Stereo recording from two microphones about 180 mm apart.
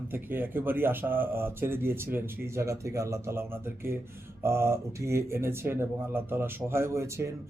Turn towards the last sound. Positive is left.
turn(degrees=-15)  # may be behind; listen again after turning